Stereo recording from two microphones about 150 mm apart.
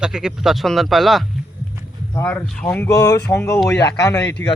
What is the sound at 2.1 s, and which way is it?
Speech, 15° left (ahead or behind).